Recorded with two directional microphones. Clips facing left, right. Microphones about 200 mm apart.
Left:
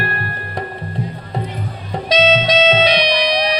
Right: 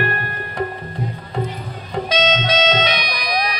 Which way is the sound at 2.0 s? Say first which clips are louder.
Left 5 dB; 35° left (ahead or behind).